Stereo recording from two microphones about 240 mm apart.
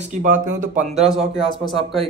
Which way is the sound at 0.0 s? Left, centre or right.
Right.